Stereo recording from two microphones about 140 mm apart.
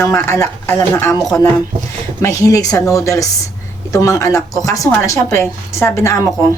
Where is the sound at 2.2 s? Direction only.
25° left (ahead or behind).